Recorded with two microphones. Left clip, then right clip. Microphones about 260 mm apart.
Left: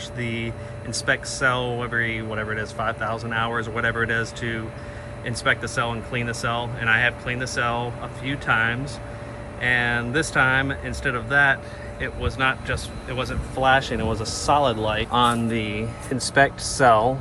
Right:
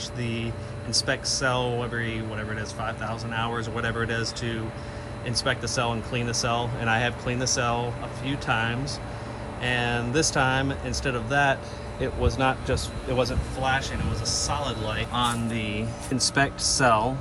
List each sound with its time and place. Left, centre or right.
0.2 s speech: centre
13.6 s speech: centre